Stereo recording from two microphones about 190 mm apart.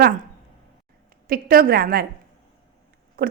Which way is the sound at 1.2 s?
50° right (ahead or behind).